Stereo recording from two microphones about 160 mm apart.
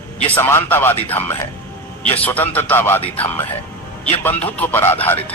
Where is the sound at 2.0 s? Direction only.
10° left (ahead or behind).